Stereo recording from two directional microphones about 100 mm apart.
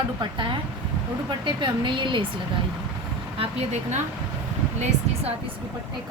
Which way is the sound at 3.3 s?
65° right (ahead or behind).